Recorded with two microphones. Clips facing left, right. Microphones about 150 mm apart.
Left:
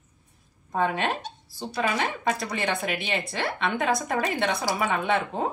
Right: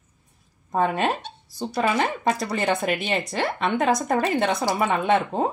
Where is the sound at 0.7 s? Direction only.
45° right (ahead or behind).